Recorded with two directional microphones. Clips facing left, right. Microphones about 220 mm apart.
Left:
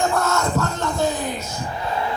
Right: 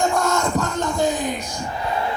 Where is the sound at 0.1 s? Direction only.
15° right (ahead or behind).